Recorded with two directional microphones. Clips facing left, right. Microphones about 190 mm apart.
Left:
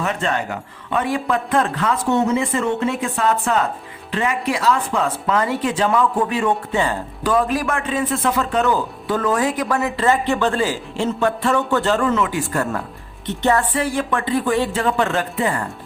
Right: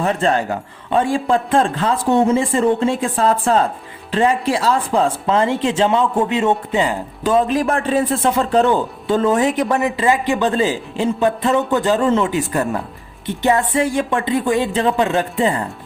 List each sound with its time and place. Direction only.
0.0 s a man's voice: 35° right (ahead or behind)
7.7 s a man's voice: 35° right (ahead or behind); by 12.0 s 15° right (ahead or behind)
12.0 s a man's voice: 25° right (ahead or behind)